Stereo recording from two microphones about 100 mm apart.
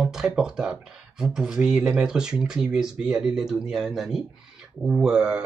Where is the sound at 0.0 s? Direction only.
5° right (ahead or behind).